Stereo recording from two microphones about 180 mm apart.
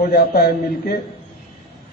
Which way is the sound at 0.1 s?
60° left (ahead or behind).